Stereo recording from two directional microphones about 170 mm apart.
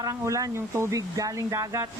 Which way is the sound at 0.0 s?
20° right (ahead or behind).